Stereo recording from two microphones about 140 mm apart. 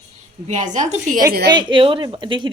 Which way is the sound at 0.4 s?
60° right (ahead or behind).